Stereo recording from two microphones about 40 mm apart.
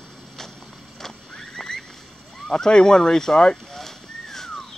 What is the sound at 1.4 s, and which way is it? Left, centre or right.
Rodents, centre.